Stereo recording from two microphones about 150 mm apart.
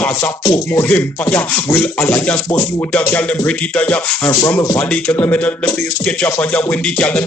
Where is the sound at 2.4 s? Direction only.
25° left (ahead or behind).